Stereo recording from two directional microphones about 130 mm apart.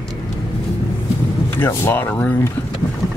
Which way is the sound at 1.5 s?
20° left (ahead or behind).